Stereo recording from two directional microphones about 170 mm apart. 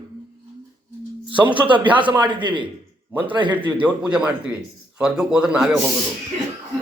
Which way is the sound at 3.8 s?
5° right (ahead or behind).